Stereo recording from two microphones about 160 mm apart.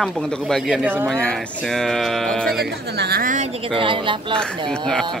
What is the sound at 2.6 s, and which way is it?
Speech, 80° right.